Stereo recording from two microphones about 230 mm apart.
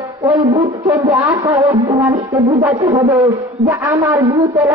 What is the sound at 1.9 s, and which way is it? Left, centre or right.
Music, right.